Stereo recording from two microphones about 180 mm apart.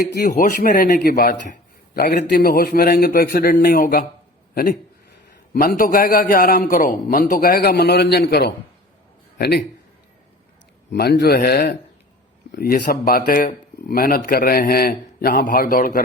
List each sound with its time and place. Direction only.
0.1 s speech: 65° left (ahead or behind)
0.4 s a man's voice: 50° left (ahead or behind)
10.9 s speech: 65° left (ahead or behind)